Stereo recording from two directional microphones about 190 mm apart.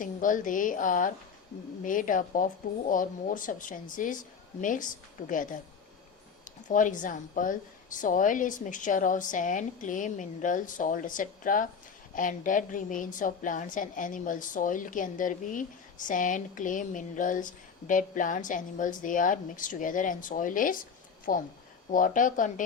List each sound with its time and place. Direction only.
0.0 s a woman's voice: 45° left (ahead or behind)